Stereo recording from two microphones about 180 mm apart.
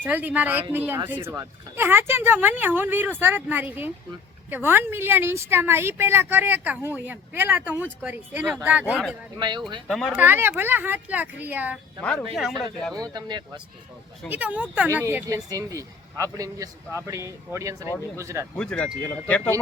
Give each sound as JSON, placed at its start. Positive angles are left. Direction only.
{"t": 0.0, "sound": "a woman's voice", "side_deg": -10}
{"t": 9.4, "sound": "speech", "side_deg": -25}
{"t": 9.8, "sound": "a woman's voice", "side_deg": 0}
{"t": 12.0, "sound": "speech", "side_deg": 5}
{"t": 12.9, "sound": "speech", "side_deg": -20}
{"t": 14.3, "sound": "a woman's voice", "side_deg": -10}
{"t": 18.5, "sound": "speech", "side_deg": 5}